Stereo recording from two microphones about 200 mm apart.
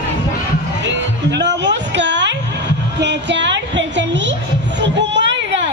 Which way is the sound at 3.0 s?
60° right (ahead or behind).